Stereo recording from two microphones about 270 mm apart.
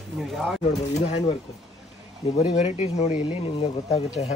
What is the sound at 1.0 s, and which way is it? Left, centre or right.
Speech, left.